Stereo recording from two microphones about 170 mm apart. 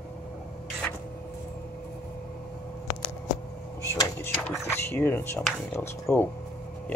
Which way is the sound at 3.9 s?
15° left (ahead or behind).